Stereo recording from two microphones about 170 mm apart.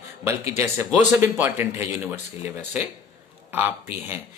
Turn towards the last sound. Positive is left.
turn(degrees=-10)  # may be behind; listen again after turning